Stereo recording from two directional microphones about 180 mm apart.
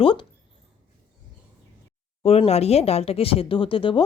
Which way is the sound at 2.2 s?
35° left (ahead or behind).